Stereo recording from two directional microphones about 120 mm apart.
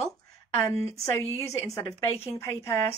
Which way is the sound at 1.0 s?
25° left (ahead or behind).